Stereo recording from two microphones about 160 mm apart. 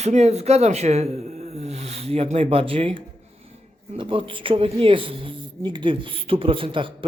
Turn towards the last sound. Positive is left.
turn(degrees=-30)  # may be behind; listen again after turning